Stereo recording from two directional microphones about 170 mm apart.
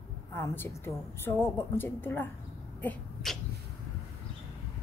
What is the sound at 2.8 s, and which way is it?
Sneeze, 10° left (ahead or behind).